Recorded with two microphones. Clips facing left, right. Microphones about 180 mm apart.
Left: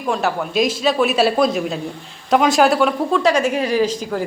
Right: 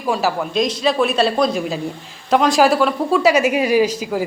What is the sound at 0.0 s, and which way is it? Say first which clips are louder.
A woman's voice: right 1 dB; 5° right (ahead or behind).